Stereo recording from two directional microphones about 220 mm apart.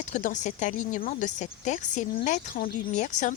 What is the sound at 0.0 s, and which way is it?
Speech, 35° left (ahead or behind).